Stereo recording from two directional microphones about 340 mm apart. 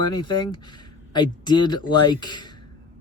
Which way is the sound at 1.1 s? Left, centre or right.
Centre.